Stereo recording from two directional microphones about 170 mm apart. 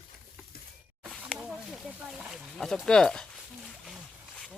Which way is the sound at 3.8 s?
Centre (ahead or behind).